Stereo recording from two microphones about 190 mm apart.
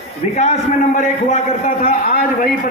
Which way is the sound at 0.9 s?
40° left (ahead or behind).